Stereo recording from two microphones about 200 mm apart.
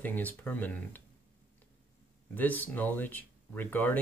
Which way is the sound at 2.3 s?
10° left (ahead or behind).